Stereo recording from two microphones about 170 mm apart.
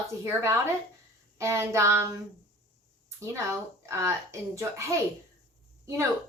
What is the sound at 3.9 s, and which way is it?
A woman's voice, 15° right (ahead or behind).